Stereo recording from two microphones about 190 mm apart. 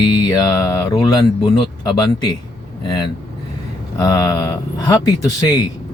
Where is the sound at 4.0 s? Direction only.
20° left (ahead or behind).